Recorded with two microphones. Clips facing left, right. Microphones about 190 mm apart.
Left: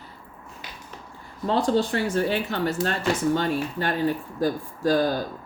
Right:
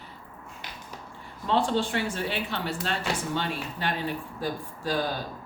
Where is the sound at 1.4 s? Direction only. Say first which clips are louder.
Left 3 dB; 40° left (ahead or behind).